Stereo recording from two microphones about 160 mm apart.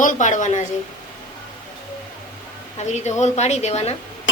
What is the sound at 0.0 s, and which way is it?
Speech, 50° left (ahead or behind).